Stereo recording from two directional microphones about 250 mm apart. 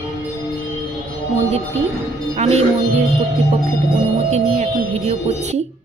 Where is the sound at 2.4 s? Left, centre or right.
Right.